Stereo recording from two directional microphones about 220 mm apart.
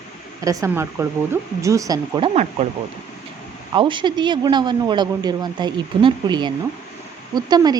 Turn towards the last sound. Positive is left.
turn(degrees=-20)  # may be behind; listen again after turning